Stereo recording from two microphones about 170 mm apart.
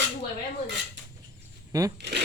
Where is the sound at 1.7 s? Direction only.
20° right (ahead or behind).